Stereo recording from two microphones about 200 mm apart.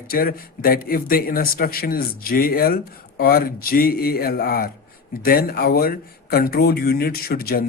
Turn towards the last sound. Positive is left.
turn(degrees=45)  # may be behind; listen again after turning